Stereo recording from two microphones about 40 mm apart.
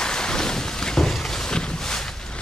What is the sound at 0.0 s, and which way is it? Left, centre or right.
Boat, centre.